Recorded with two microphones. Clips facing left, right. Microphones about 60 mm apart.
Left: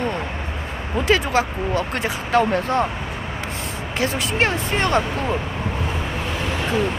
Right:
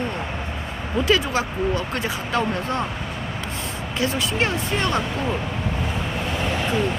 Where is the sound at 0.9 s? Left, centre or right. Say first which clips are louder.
Left 2 dB; left.